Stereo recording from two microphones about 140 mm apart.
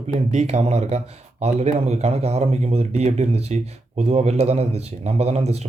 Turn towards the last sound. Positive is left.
turn(degrees=-50)  # may be behind; listen again after turning